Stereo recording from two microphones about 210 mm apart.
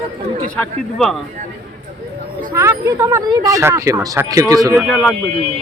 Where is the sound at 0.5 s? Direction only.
Centre (ahead or behind).